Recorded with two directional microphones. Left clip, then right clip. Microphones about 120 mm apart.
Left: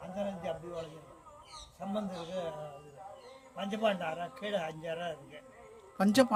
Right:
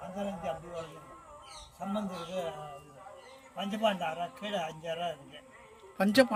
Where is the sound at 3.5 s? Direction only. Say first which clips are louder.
Right 1 dB; 25° left (ahead or behind).